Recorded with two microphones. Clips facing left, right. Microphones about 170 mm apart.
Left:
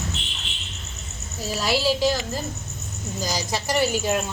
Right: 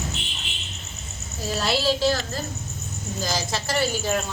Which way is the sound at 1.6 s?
10° left (ahead or behind).